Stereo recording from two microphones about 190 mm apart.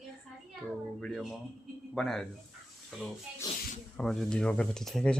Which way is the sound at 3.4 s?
20° left (ahead or behind).